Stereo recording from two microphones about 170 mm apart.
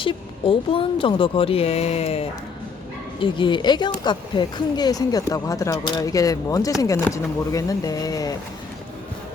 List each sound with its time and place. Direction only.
0.0 s speech: 30° left (ahead or behind)